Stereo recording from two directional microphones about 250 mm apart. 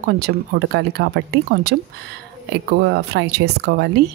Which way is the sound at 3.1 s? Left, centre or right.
Right.